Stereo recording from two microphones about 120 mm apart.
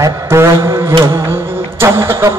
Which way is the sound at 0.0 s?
20° right (ahead or behind).